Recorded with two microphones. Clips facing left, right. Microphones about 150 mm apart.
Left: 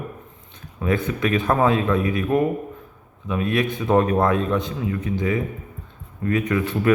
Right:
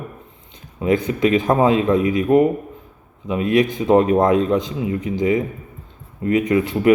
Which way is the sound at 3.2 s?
20° right (ahead or behind).